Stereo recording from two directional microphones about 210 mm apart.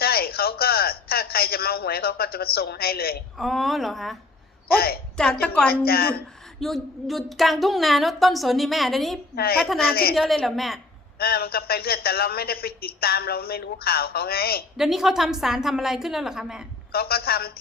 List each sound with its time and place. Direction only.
0.0 s a sound: 45° left (ahead or behind)
3.3 s speech: centre (ahead or behind)
4.7 s a man's voice: 45° left (ahead or behind)
5.1 s speech: 5° left (ahead or behind)
5.6 s a man's voice: 45° left (ahead or behind)
6.6 s speech: centre (ahead or behind)
9.3 s a woman's voice: 45° left (ahead or behind)
9.6 s speech: centre (ahead or behind)
9.8 s a man's voice: 45° left (ahead or behind)
10.2 s speech: centre (ahead or behind)
11.2 s a man's voice: 45° left (ahead or behind)
14.8 s speech: centre (ahead or behind)
16.9 s a man's voice: 45° left (ahead or behind)